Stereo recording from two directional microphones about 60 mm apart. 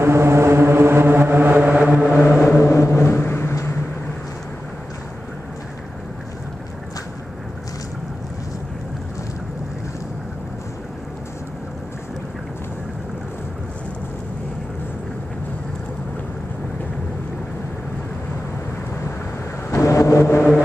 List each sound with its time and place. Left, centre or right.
0.0 s vehicle: right
1.9 s a sound: centre
2.4 s music: left
19.7 s vehicle: left